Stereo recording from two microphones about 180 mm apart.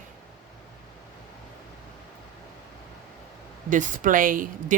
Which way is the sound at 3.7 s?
45° right (ahead or behind).